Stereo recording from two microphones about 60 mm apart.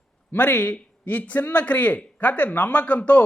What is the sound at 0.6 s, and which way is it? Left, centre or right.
A man's voice, left.